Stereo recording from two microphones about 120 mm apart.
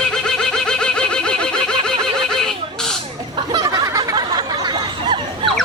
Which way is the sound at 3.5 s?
30° right (ahead or behind).